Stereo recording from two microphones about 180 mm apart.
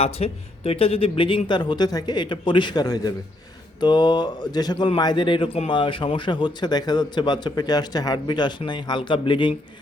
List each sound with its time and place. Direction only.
0.0 s speech: 35° left (ahead or behind)